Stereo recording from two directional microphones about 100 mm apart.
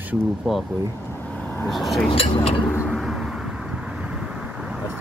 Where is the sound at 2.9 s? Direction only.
Centre (ahead or behind).